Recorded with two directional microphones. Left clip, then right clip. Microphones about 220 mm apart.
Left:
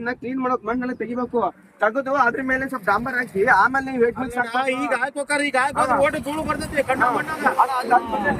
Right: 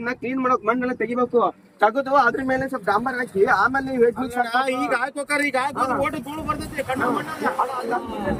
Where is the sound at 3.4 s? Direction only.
20° left (ahead or behind).